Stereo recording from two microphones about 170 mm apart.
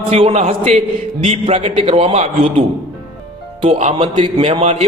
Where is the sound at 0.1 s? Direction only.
35° right (ahead or behind).